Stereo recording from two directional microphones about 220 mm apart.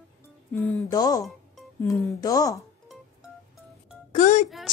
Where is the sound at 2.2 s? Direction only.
15° left (ahead or behind).